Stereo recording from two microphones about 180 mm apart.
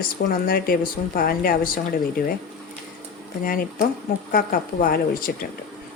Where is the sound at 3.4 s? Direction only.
50° left (ahead or behind).